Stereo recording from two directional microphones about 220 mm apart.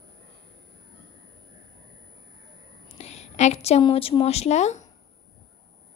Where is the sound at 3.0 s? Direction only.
30° left (ahead or behind).